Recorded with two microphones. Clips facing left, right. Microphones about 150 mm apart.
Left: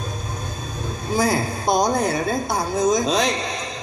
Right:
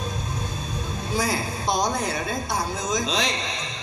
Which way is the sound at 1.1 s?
55° left (ahead or behind).